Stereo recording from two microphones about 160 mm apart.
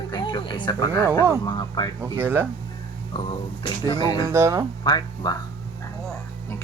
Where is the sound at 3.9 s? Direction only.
25° left (ahead or behind).